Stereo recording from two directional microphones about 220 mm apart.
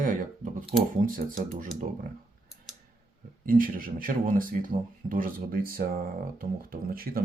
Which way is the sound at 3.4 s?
40° right (ahead or behind).